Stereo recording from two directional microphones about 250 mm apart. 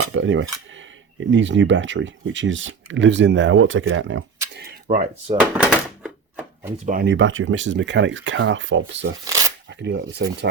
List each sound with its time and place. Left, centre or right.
0.2 s speech: right
4.5 s speech: right
5.4 s a sound: centre
6.8 s speech: right
9.2 s shuffling cards: centre
9.6 s speech: right